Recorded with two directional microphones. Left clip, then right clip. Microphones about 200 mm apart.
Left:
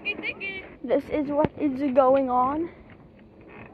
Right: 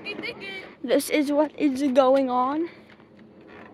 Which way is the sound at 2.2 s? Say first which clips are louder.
Even; 15° right (ahead or behind).